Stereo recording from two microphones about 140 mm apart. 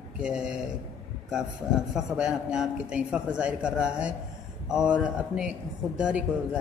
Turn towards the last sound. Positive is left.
turn(degrees=-10)  # may be behind; listen again after turning